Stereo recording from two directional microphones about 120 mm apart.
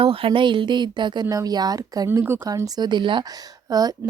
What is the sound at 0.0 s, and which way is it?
Speech, 50° right (ahead or behind).